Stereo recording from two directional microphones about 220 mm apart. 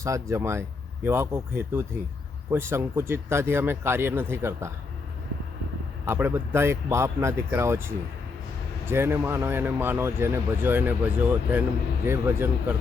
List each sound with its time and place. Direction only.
0.0 s speech: 15° right (ahead or behind)
6.1 s speech: 10° right (ahead or behind)